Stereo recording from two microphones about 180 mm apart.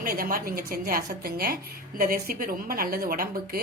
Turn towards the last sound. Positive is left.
turn(degrees=-55)  # may be behind; listen again after turning